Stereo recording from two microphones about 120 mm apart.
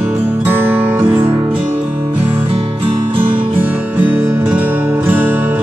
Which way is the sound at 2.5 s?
45° right (ahead or behind).